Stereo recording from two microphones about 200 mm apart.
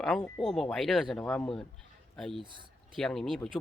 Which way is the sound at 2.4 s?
25° right (ahead or behind).